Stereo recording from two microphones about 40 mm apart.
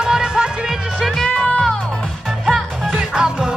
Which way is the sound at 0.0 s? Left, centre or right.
Centre.